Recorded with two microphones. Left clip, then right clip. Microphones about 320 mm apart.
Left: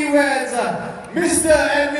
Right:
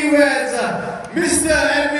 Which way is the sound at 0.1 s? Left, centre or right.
Centre.